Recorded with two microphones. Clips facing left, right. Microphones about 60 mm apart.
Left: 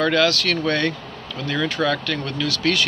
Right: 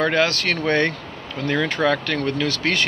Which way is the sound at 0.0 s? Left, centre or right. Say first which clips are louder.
Left 1 dB; right.